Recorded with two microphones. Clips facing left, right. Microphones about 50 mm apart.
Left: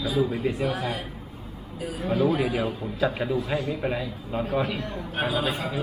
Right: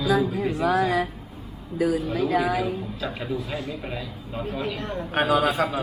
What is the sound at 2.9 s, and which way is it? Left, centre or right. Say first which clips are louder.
Speech: left 4 dB; centre.